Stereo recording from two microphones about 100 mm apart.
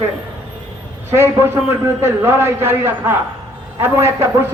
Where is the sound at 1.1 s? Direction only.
25° right (ahead or behind).